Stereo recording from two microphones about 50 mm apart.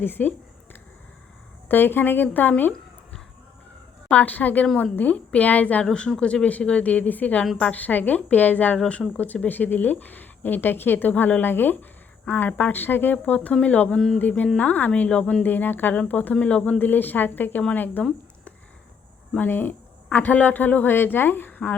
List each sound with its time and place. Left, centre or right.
0.0 s a sound: left
1.6 s speech: left
4.1 s a woman's voice: left
5.8 s a woman's voice: centre; by 11.1 s left
11.1 s a woman's voice: left
14.2 s a woman's voice: left
15.4 s a woman's voice: left
16.8 s speech: left
19.4 s speech: left